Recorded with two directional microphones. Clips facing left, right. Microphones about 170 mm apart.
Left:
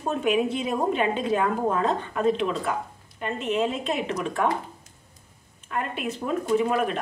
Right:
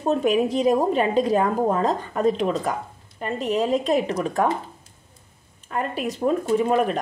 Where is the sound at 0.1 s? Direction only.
35° right (ahead or behind).